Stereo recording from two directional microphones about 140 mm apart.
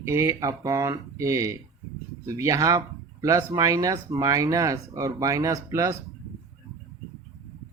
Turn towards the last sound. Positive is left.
turn(degrees=-20)  # may be behind; listen again after turning